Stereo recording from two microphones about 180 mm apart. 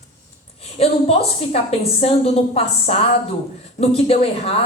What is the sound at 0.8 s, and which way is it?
A woman's voice, 35° left (ahead or behind).